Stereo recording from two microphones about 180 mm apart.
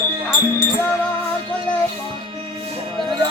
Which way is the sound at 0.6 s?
10° left (ahead or behind).